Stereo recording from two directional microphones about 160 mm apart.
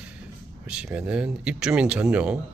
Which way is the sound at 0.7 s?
5° right (ahead or behind).